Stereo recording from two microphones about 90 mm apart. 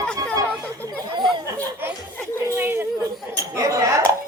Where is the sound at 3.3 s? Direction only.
40° right (ahead or behind).